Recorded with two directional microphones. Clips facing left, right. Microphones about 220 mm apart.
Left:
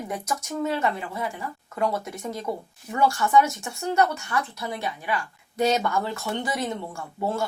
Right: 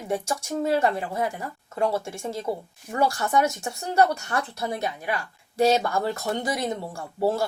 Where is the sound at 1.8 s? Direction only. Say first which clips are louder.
Right 1 dB; 30° right (ahead or behind); by 5.1 s 45° right (ahead or behind).